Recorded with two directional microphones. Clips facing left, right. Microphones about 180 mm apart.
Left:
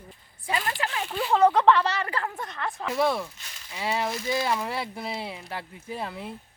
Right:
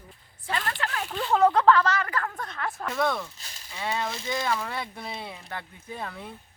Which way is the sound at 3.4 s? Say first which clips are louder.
Even; 35° right (ahead or behind).